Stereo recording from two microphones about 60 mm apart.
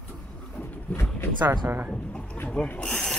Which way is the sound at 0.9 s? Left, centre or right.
Left.